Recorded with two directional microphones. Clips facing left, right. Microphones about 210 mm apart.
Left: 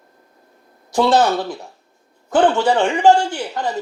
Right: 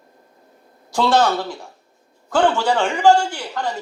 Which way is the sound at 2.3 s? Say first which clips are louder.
Left 3 dB; 20° left (ahead or behind).